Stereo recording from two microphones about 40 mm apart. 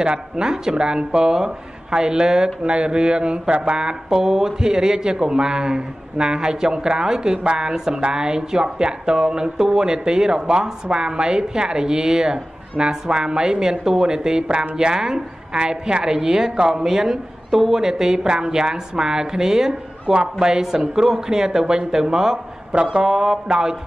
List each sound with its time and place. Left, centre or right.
0.0 s a woman's voice: centre
22.7 s speech: right
23.0 s a woman's voice: centre